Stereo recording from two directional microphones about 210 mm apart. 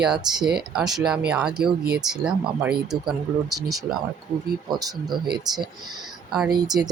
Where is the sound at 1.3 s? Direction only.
5° right (ahead or behind).